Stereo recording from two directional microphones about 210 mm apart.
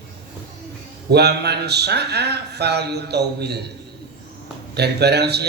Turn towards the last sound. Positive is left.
turn(degrees=-50)  # may be behind; listen again after turning